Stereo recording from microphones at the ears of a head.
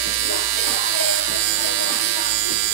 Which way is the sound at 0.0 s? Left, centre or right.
Right.